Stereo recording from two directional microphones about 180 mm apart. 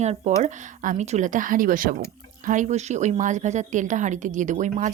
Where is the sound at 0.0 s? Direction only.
40° right (ahead or behind).